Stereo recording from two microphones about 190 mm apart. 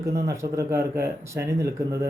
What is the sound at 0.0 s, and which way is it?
Speech, 15° right (ahead or behind).